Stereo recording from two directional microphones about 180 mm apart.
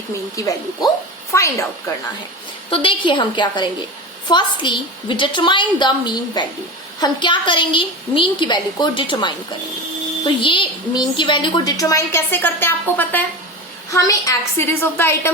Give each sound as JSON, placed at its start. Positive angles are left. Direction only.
{"t": 0.3, "sound": "a woman's voice", "side_deg": 20}
{"t": 2.6, "sound": "a woman's voice", "side_deg": 30}